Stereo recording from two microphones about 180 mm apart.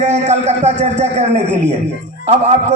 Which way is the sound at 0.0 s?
40° right (ahead or behind).